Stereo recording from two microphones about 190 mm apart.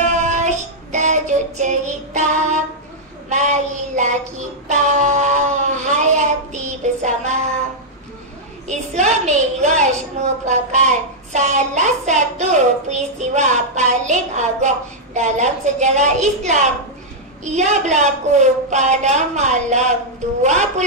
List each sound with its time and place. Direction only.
0.0 s music: 40° right (ahead or behind)
2.1 s child singing: 40° right (ahead or behind)
8.6 s a woman's voice: 40° right (ahead or behind)
10.5 s hands: 40° right (ahead or behind)